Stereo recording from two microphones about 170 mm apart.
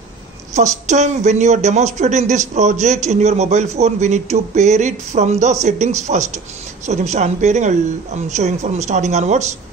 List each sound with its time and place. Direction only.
0.8 s speech: 45° right (ahead or behind)